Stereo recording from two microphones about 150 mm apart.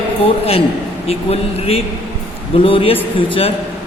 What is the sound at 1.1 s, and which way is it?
A man's voice, 40° left (ahead or behind).